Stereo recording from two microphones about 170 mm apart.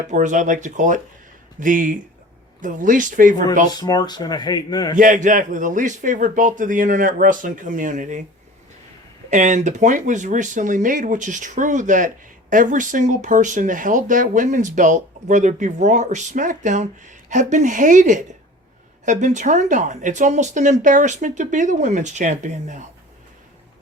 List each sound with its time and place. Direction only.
0.1 s speech: 45° right (ahead or behind)
3.7 s speech: 25° left (ahead or behind)
4.9 s speech: 50° right (ahead or behind)
9.3 s speech: 45° right (ahead or behind)